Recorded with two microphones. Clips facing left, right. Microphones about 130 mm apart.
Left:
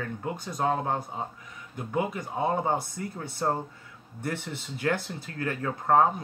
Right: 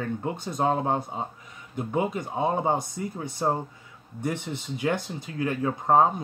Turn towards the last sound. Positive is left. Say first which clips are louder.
# right 2 dB
turn(degrees=-20)  # may be behind; listen again after turning